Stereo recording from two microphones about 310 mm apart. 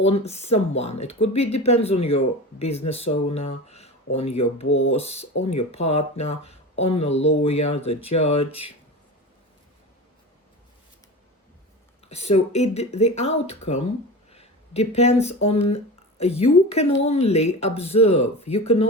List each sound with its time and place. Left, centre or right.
0.3 s speech: centre
12.0 s speech: left